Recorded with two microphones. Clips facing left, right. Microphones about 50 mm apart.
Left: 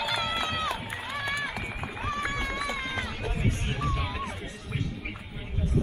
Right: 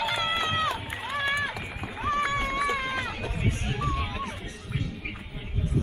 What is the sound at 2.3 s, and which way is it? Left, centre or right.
Run, right.